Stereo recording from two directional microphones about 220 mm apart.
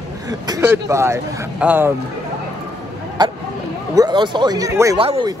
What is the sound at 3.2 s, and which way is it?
Speech, 20° right (ahead or behind).